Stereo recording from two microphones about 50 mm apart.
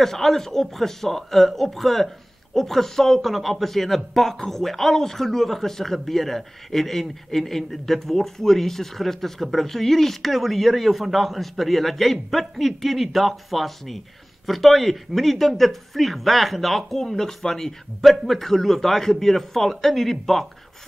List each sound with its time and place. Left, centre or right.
0.0 s speech: centre